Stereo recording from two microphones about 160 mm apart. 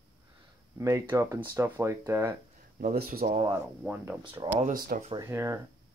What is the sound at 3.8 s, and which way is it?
Speech, 10° right (ahead or behind).